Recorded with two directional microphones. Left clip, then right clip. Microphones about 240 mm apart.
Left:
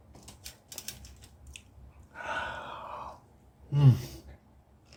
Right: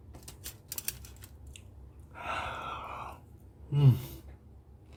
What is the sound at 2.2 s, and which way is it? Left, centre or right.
Gasp, centre.